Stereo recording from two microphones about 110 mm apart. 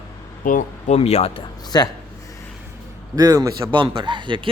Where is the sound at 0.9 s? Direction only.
75° left (ahead or behind).